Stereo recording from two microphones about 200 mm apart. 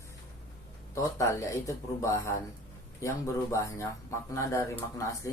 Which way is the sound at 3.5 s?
15° left (ahead or behind).